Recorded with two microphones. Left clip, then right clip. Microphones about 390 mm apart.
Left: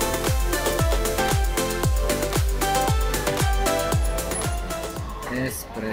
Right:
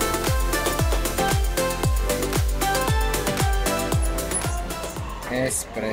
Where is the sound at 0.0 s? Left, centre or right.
Centre.